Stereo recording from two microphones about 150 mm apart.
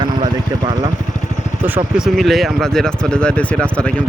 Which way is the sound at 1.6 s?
10° right (ahead or behind).